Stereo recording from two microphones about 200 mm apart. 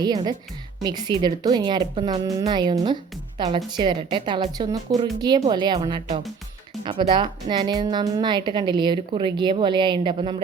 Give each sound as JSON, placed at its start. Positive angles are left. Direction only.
{"t": 0.0, "sound": "a woman's voice", "side_deg": -20}